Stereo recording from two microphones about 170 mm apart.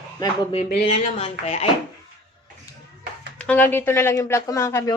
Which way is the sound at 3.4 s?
10° left (ahead or behind).